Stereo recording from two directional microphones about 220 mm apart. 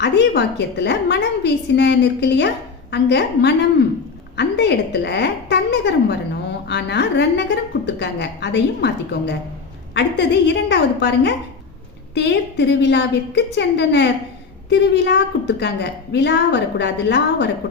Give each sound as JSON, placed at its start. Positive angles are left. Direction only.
{"t": 0.0, "sound": "a woman's voice", "side_deg": 50}